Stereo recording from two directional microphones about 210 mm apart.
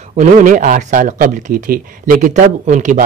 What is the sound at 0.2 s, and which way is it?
Speech, 35° right (ahead or behind).